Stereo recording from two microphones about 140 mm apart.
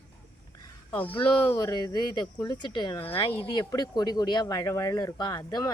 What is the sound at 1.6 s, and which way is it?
Speech, 25° left (ahead or behind).